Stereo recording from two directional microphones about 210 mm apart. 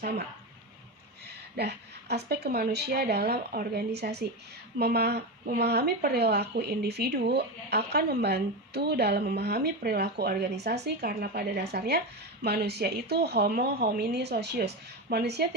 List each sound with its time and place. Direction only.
1.5 s speech: 50° right (ahead or behind)